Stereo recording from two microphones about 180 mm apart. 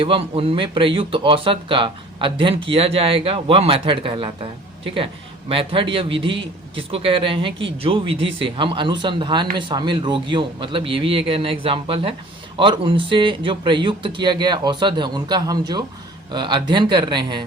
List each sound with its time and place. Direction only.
0.0 s a man's voice: 30° right (ahead or behind)
5.5 s a man's voice: 30° right (ahead or behind)